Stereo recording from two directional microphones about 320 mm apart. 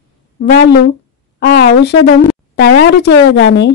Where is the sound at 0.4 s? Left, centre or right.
Left.